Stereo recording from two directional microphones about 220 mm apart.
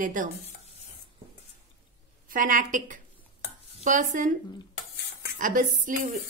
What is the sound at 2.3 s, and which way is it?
A woman's voice, 35° right (ahead or behind).